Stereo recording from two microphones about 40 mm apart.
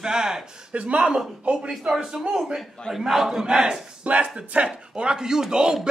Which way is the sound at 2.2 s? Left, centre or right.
Right.